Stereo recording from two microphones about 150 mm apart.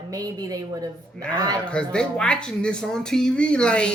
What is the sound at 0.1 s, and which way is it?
Speech, 25° right (ahead or behind).